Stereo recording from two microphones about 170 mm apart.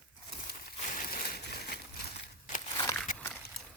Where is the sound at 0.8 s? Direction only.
50° left (ahead or behind).